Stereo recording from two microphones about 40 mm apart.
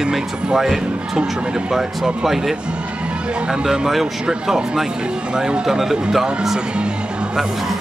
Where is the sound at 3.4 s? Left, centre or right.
Right.